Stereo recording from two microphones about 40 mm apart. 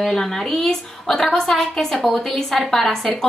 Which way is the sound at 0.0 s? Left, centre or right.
Centre.